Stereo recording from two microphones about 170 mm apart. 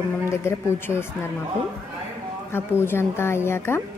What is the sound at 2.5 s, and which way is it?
Speech, 15° left (ahead or behind).